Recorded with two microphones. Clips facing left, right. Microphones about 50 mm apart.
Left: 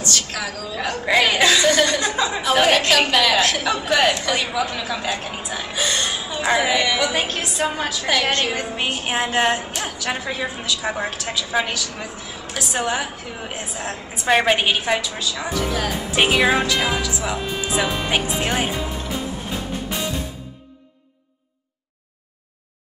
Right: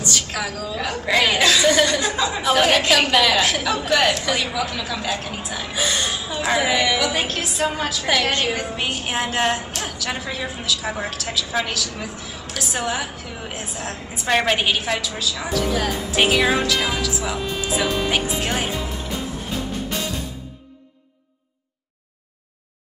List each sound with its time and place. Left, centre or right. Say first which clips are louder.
0.0 s a woman's voice: even; centre
0.7 s a woman's voice: left 2 dB; centre
5.7 s gasp: even; centre
6.0 s a woman's voice: left 1 dB; centre
17.8 s music: right 1 dB; centre